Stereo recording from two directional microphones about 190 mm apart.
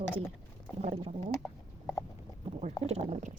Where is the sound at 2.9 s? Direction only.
35° right (ahead or behind).